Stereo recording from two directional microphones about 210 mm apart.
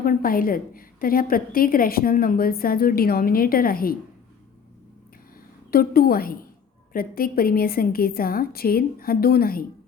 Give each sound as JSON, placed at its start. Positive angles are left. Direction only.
{"t": 0.0, "sound": "a woman's voice", "side_deg": 45}
{"t": 5.7, "sound": "a woman's voice", "side_deg": 45}